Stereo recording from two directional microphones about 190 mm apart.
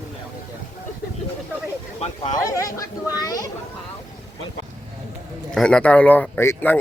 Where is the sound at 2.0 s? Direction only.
35° left (ahead or behind).